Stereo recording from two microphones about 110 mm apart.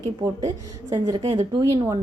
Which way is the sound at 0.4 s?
35° right (ahead or behind).